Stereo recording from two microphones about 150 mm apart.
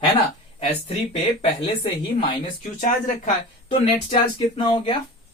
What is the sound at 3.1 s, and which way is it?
Speech, 55° left (ahead or behind).